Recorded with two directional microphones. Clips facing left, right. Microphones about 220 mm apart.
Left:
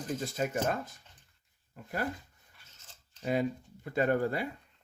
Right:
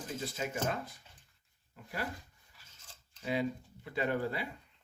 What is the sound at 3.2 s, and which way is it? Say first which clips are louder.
Speech: left 3 dB; 45° left (ahead or behind).